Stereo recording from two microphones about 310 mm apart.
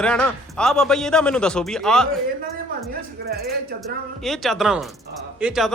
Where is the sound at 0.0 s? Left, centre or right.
Centre.